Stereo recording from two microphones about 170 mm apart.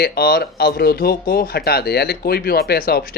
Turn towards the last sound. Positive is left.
turn(degrees=70)  # may be behind; listen again after turning